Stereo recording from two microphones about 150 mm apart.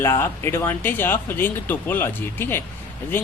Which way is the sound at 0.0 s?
15° left (ahead or behind).